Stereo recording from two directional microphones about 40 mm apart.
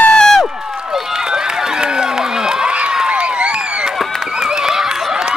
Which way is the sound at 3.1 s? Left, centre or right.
Right.